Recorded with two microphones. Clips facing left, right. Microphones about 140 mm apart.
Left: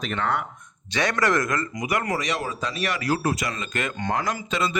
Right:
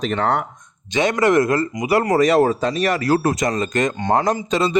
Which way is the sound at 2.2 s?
55° right (ahead or behind).